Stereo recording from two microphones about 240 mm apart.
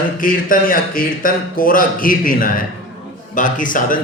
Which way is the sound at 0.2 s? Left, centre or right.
Left.